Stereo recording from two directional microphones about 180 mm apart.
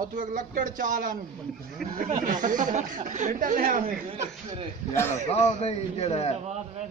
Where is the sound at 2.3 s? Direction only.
45° right (ahead or behind).